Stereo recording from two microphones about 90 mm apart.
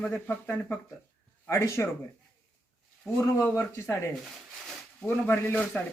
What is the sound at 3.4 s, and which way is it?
Speech, 25° left (ahead or behind).